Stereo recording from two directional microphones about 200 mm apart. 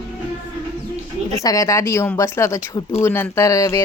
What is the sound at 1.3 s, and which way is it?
Speech, 15° left (ahead or behind).